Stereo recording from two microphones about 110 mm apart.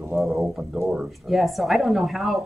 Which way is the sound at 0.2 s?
Centre (ahead or behind).